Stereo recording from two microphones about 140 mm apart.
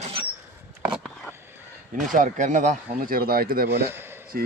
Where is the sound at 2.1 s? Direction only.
65° right (ahead or behind); by 3.6 s 90° right.